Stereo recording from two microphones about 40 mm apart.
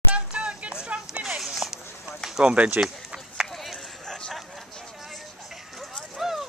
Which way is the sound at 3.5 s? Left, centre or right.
Centre.